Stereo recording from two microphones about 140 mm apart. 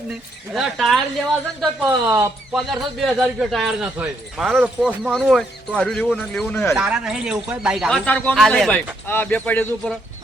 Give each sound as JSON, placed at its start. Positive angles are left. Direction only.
{"t": 0.5, "sound": "speech", "side_deg": 0}
{"t": 1.8, "sound": "speech", "side_deg": -25}
{"t": 2.5, "sound": "speech", "side_deg": 0}
{"t": 3.8, "sound": "speech", "side_deg": -15}
{"t": 6.7, "sound": "speech", "side_deg": -5}